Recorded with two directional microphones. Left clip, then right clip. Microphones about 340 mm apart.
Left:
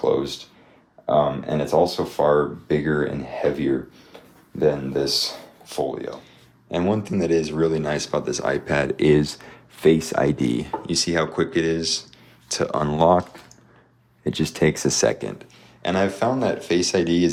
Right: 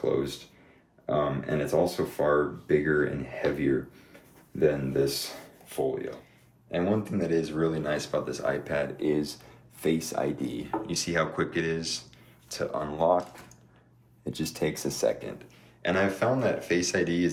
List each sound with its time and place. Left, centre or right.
0.0 s speech: centre
10.4 s speech: centre
14.3 s speech: left
15.2 s speech: centre